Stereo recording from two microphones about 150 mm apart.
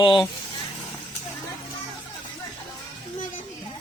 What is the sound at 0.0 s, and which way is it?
Speech, 30° left (ahead or behind).